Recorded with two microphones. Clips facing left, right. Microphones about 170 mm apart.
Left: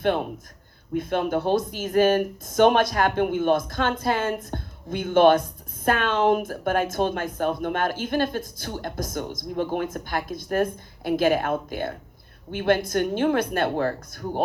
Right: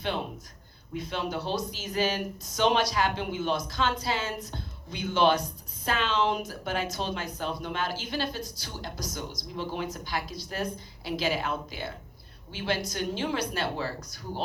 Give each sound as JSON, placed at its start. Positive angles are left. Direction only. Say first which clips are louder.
{"t": 0.0, "sound": "a woman's voice", "louder": "left 8 dB", "side_deg": 55}